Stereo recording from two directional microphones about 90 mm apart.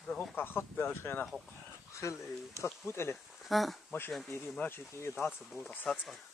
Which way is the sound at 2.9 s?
30° left (ahead or behind).